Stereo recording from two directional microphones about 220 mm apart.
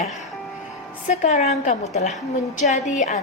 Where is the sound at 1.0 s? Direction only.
35° left (ahead or behind).